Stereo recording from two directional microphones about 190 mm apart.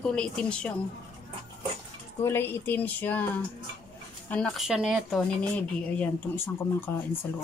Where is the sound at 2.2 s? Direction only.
10° left (ahead or behind).